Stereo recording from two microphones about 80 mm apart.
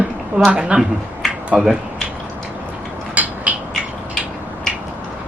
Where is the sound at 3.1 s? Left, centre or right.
Centre.